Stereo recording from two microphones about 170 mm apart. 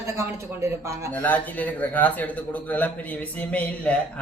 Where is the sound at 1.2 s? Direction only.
10° left (ahead or behind).